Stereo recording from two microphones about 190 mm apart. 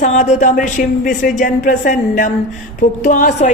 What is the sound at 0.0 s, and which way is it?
Speech, 40° left (ahead or behind).